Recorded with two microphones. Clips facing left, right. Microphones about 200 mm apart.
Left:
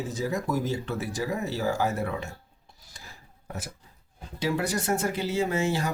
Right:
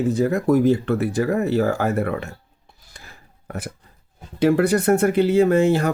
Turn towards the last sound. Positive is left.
turn(degrees=-60)  # may be behind; listen again after turning